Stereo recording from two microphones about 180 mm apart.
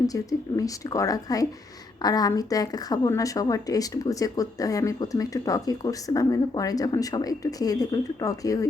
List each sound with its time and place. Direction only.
0.1 s speech: 20° left (ahead or behind)